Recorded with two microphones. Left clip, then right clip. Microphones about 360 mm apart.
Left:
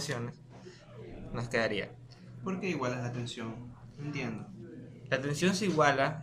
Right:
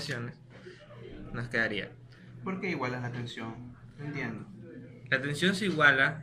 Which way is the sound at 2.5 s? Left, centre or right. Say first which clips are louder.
Right 1 dB; centre.